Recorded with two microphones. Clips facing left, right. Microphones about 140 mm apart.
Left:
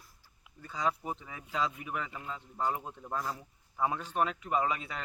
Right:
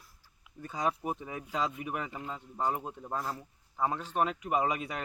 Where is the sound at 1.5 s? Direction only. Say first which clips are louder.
Even; 5° right (ahead or behind).